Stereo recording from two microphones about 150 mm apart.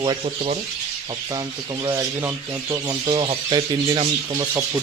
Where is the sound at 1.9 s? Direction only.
20° right (ahead or behind).